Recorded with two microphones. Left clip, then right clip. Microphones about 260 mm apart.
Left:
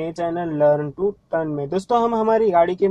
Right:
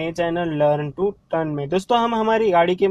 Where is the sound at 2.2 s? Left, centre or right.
Right.